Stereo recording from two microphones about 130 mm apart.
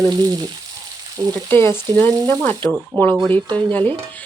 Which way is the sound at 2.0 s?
15° left (ahead or behind).